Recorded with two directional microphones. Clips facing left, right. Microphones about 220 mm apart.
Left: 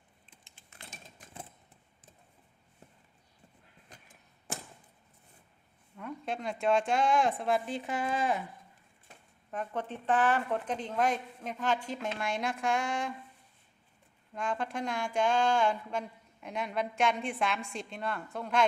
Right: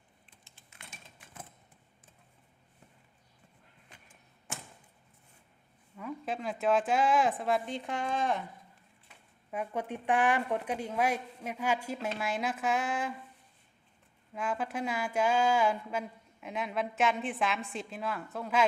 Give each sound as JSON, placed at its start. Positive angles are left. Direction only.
{"t": 0.8, "sound": "engine", "side_deg": 35}
{"t": 3.8, "sound": "vehicle", "side_deg": 40}
{"t": 6.0, "sound": "speech", "side_deg": 0}
{"t": 9.5, "sound": "a woman's voice", "side_deg": -10}
{"t": 14.3, "sound": "speech", "side_deg": -5}